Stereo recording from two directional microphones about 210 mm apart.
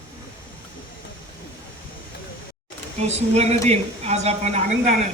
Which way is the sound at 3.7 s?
30° right (ahead or behind).